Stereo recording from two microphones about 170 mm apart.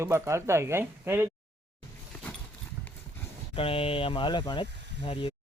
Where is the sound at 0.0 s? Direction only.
15° right (ahead or behind).